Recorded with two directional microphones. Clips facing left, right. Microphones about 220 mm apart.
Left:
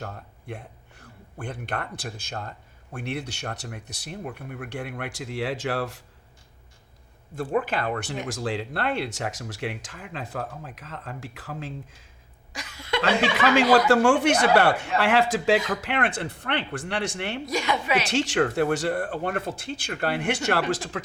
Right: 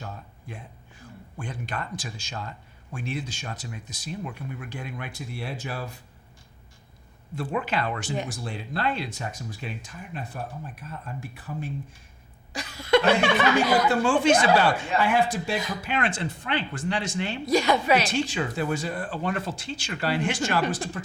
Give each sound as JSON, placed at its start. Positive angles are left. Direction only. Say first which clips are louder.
{"t": 0.0, "sound": "speech", "louder": "left 2 dB", "side_deg": 65}
{"t": 7.3, "sound": "speech", "louder": "left 2 dB", "side_deg": 50}
{"t": 8.3, "sound": "speech", "louder": "left 5 dB", "side_deg": 90}
{"t": 12.5, "sound": "cough", "louder": "right 9 dB", "side_deg": -35}
{"t": 13.6, "sound": "speech", "louder": "left 4 dB", "side_deg": 90}
{"t": 17.4, "sound": "a woman's voice", "louder": "right 6 dB", "side_deg": -35}
{"t": 18.1, "sound": "speech", "louder": "left 4 dB", "side_deg": 75}
{"t": 18.4, "sound": "speech", "louder": "left 5 dB", "side_deg": 65}